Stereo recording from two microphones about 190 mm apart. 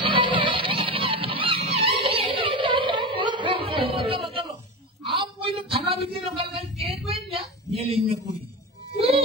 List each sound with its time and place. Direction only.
0.0 s music: 25° right (ahead or behind)
5.2 s a sound: 30° right (ahead or behind)
8.9 s child singing: 30° right (ahead or behind)